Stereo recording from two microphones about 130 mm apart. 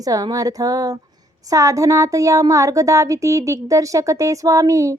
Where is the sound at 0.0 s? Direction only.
30° right (ahead or behind).